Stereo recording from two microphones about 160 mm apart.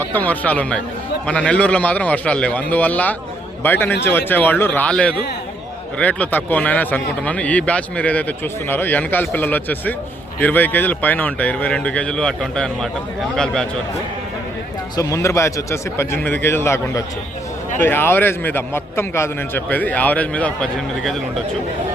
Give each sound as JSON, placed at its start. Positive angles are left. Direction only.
{"t": 0.0, "sound": "speech", "side_deg": 10}
{"t": 14.9, "sound": "speech", "side_deg": 20}